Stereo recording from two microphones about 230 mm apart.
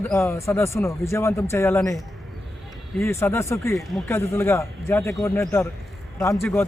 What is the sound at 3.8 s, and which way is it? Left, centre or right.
Speech, centre.